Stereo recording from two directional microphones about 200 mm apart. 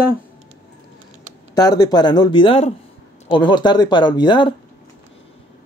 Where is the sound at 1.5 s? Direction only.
20° left (ahead or behind).